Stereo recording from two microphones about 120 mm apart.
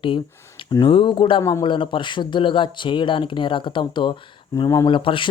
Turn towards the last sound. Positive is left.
turn(degrees=45)  # may be behind; listen again after turning